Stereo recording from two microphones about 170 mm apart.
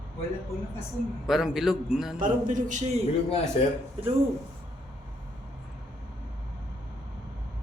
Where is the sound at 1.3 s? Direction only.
Centre (ahead or behind).